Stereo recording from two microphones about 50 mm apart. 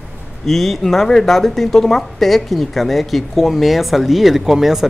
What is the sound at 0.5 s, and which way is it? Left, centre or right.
Speech, centre.